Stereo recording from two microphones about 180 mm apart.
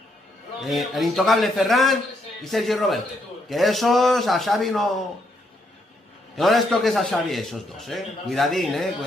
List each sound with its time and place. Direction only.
0.6 s a man's voice: centre (ahead or behind)
6.3 s a man's voice: centre (ahead or behind)